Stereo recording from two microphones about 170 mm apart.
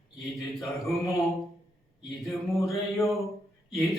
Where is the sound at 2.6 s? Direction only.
15° left (ahead or behind).